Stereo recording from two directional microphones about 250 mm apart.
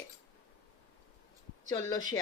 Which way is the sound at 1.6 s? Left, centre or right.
Centre.